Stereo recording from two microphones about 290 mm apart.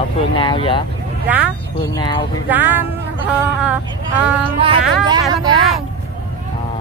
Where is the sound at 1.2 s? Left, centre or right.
Centre.